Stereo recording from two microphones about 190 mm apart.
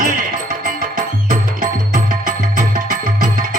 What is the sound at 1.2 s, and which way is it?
Music, 45° right (ahead or behind).